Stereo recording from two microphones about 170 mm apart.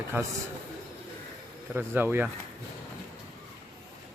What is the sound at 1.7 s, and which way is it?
Speech, 10° right (ahead or behind).